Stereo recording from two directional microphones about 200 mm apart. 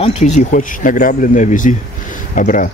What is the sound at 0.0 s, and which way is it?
Speech, 35° left (ahead or behind).